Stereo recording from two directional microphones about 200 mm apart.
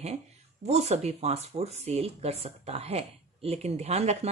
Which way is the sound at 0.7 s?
30° right (ahead or behind).